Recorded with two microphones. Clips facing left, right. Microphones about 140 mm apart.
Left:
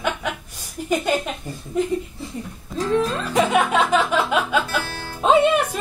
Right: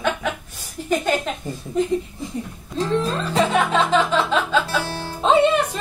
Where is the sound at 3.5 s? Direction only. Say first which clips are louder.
Even; 10° left (ahead or behind).